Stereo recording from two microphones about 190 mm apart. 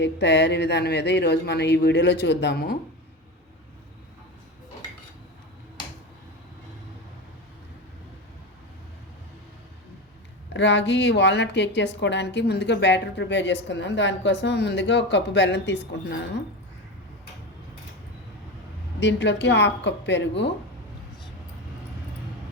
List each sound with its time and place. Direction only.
0.0 s speech: 65° left (ahead or behind)
10.5 s a woman's voice: 70° left (ahead or behind)
18.9 s a woman's voice: 70° left (ahead or behind)